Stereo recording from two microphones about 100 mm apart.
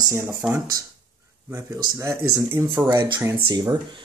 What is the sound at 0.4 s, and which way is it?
Speech, 10° right (ahead or behind).